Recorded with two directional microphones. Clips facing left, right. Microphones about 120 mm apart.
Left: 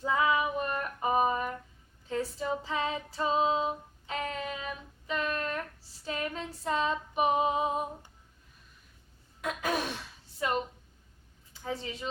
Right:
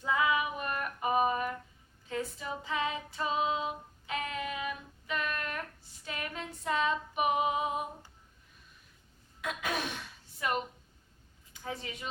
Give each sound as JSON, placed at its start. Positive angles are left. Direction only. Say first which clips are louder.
{"t": 0.0, "sound": "female singing", "louder": "left 2 dB", "side_deg": 30}
{"t": 5.0, "sound": "child singing", "louder": "left 3 dB", "side_deg": 30}
{"t": 6.1, "sound": "female singing", "louder": "left 5 dB", "side_deg": 35}
{"t": 9.4, "sound": "gasp", "louder": "left 3 dB", "side_deg": 35}
{"t": 11.5, "sound": "a woman's voice", "louder": "left 4 dB", "side_deg": 30}